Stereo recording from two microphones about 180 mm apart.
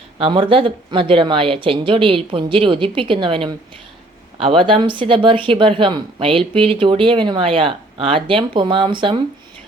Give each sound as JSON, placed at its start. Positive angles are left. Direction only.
{"t": 0.2, "sound": "speech", "side_deg": -30}